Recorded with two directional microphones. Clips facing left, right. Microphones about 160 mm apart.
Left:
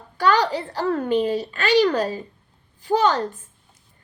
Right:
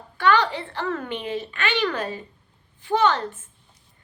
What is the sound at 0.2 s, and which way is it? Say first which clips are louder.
A child's voice: left 1 dB; 35° left (ahead or behind).